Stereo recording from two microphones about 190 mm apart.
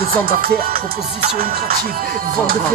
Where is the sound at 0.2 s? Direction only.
50° right (ahead or behind).